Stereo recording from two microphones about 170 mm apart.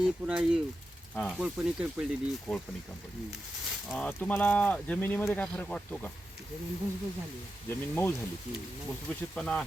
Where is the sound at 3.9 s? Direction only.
5° left (ahead or behind).